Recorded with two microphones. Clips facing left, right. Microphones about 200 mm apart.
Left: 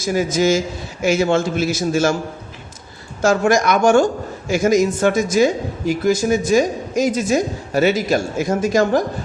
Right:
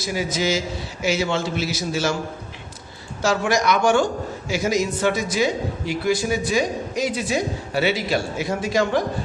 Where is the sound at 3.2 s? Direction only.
50° left (ahead or behind).